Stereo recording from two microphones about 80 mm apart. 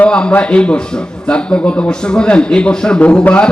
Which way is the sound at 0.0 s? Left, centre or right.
Centre.